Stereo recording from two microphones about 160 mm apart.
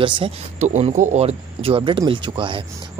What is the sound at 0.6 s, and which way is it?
Speech, 45° right (ahead or behind).